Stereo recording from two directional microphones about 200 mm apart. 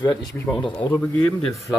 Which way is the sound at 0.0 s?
10° left (ahead or behind).